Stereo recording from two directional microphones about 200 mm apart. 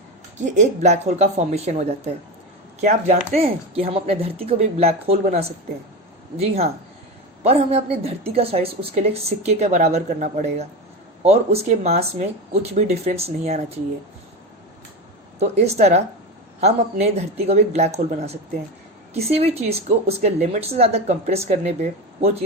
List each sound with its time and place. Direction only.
0.4 s speech: 35° right (ahead or behind)
15.4 s speech: 35° right (ahead or behind)